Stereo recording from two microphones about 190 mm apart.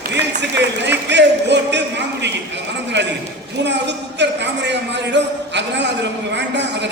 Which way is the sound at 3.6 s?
65° right (ahead or behind).